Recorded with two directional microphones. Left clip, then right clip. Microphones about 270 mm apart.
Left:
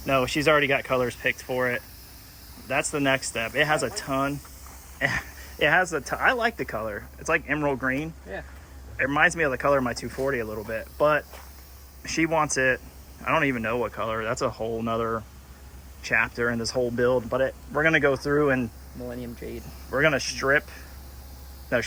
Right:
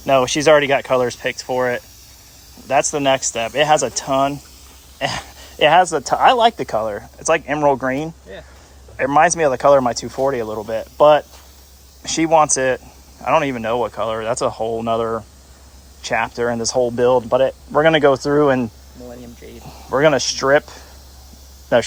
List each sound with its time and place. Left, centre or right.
0.0 s speech: centre
19.4 s speech: left
19.9 s speech: right